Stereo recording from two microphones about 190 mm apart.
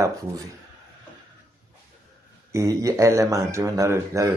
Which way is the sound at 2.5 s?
15° right (ahead or behind).